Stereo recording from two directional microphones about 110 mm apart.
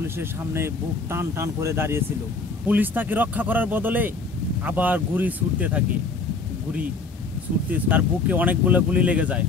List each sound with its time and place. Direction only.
0.0 s speech: 20° right (ahead or behind)
7.7 s speech: 15° right (ahead or behind)